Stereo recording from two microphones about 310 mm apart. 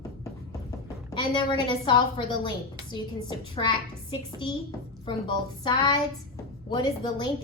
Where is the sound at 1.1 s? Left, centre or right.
Centre.